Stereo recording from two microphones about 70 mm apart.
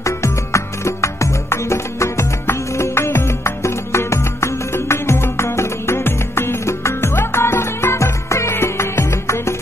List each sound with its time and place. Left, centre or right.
0.0 s music: left